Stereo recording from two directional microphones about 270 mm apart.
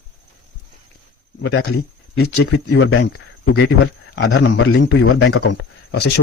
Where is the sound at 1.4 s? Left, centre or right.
Left.